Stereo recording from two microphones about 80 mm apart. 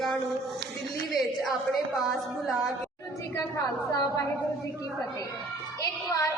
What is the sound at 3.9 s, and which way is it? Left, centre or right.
Music, left.